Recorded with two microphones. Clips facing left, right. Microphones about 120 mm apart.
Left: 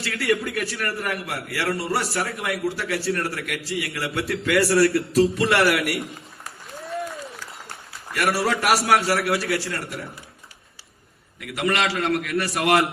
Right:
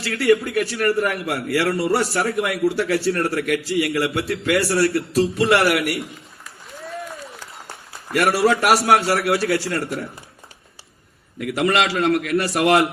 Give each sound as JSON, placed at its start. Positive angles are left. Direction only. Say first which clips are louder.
{"t": 0.0, "sound": "a man's voice", "louder": "right 6 dB", "side_deg": -30}
{"t": 8.1, "sound": "a man's voice", "louder": "right 5 dB", "side_deg": -25}
{"t": 11.3, "sound": "a man's voice", "louder": "right 5 dB", "side_deg": -30}